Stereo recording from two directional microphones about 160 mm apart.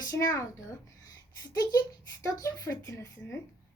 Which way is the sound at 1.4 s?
25° left (ahead or behind).